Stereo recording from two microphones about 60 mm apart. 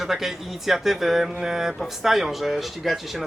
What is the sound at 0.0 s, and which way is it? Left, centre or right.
A man's voice, centre.